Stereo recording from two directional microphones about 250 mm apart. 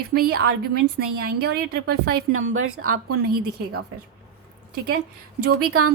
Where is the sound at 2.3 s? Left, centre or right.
Right.